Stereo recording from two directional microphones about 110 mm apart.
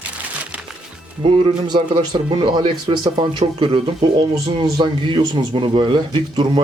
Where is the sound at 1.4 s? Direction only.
45° right (ahead or behind).